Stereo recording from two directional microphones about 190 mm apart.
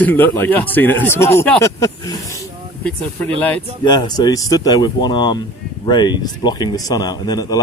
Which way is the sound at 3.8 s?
25° left (ahead or behind).